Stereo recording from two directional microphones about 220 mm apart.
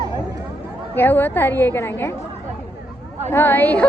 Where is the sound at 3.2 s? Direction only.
10° left (ahead or behind).